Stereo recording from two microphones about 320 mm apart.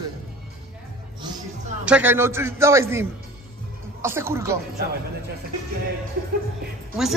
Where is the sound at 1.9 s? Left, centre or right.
Centre.